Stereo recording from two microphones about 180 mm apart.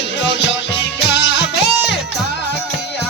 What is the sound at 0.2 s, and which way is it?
Music, 75° left (ahead or behind).